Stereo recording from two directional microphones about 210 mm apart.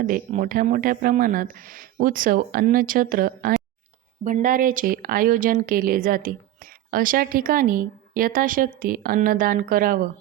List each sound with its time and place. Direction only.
0.0 s speech: 40° right (ahead or behind)